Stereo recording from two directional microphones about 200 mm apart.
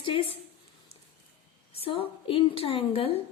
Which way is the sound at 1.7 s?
25° left (ahead or behind).